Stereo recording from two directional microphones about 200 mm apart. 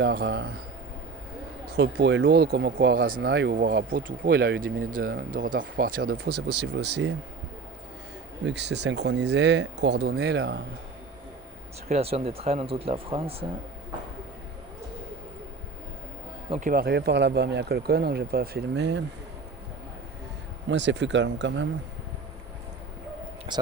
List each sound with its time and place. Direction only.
0.0 s speech: 60° right (ahead or behind)
2.0 s speech: 65° right (ahead or behind)
3.5 s speech: 50° right (ahead or behind)
8.4 s speech: 60° right (ahead or behind)
11.9 s speech: 30° right (ahead or behind)
16.5 s speech: 40° right (ahead or behind); by 19.0 s 60° right (ahead or behind)
20.7 s speech: 65° right (ahead or behind)
23.5 s speech: 25° right (ahead or behind)